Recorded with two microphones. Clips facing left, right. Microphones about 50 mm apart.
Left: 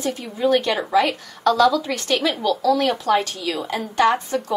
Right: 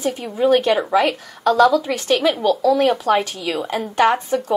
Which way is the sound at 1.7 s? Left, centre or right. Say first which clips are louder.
Right 4 dB; centre.